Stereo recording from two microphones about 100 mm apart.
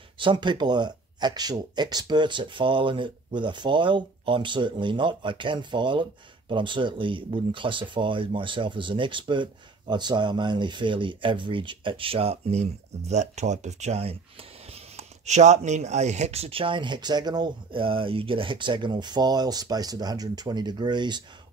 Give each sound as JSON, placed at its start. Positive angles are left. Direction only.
{"t": 0.2, "sound": "speech", "side_deg": -55}
{"t": 13.8, "sound": "speech", "side_deg": -90}
{"t": 15.8, "sound": "speech", "side_deg": -90}
{"t": 17.7, "sound": "speech", "side_deg": -60}